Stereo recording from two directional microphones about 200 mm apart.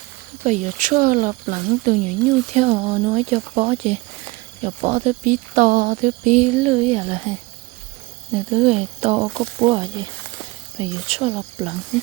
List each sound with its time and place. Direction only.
0.4 s speech: 35° right (ahead or behind)
8.5 s speech: 30° right (ahead or behind)